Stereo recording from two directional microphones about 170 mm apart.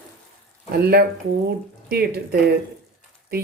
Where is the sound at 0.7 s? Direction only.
70° right (ahead or behind).